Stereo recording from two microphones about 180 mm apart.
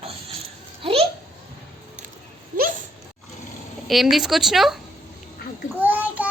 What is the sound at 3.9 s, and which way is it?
Speech, centre (ahead or behind).